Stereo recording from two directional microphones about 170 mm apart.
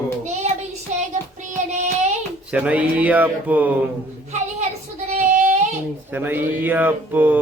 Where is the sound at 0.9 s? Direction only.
45° right (ahead or behind).